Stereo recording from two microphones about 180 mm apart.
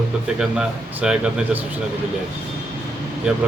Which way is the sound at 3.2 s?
5° right (ahead or behind).